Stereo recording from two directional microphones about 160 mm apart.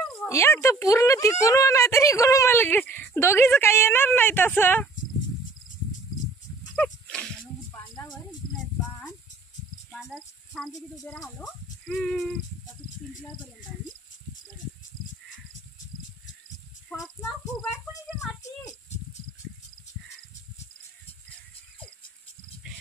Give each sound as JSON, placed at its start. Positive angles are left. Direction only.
{"t": 0.2, "sound": "speech", "side_deg": 15}
{"t": 6.7, "sound": "a sound", "side_deg": 5}
{"t": 11.9, "sound": "speech", "side_deg": 5}
{"t": 17.0, "sound": "speech", "side_deg": 0}